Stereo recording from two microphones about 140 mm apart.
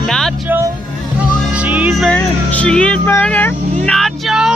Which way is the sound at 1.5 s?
10° right (ahead or behind).